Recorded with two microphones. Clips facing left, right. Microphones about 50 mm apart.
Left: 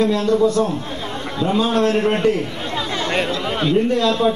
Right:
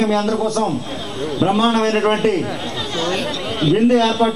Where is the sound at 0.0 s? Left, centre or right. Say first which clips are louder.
Left 1 dB; right.